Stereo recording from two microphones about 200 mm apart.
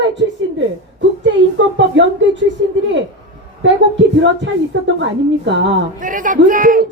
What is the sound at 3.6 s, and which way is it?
Speech, 65° right (ahead or behind).